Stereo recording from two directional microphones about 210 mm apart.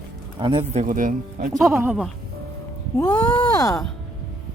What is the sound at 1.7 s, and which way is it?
Speech, 10° right (ahead or behind).